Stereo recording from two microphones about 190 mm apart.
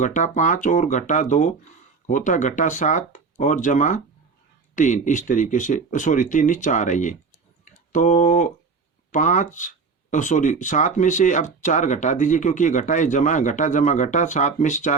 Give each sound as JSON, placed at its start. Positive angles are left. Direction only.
{"t": 0.0, "sound": "speech", "side_deg": 40}